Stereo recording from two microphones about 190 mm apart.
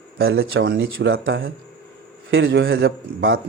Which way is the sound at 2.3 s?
75° right (ahead or behind).